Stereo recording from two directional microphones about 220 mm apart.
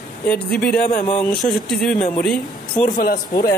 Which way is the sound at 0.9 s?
30° left (ahead or behind).